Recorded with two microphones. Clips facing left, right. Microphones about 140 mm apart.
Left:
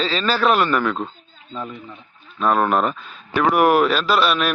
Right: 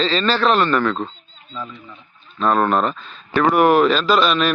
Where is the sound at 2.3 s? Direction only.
5° left (ahead or behind).